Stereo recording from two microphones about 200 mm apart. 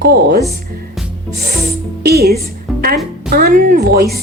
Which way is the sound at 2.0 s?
55° right (ahead or behind).